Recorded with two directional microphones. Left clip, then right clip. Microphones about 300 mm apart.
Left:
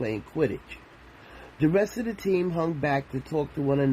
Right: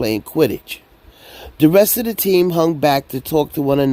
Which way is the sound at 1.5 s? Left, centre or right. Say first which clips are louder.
Right 12 dB; right.